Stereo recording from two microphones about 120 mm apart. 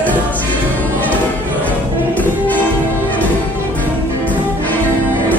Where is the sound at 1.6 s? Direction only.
15° left (ahead or behind).